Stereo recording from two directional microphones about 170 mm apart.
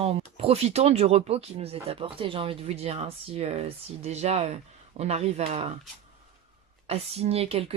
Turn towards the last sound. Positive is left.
turn(degrees=-35)  # may be behind; listen again after turning